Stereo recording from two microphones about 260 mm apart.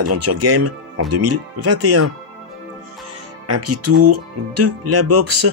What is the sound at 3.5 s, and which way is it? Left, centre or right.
Speech, right.